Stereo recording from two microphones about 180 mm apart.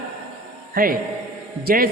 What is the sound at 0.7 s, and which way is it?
Speech, 50° right (ahead or behind).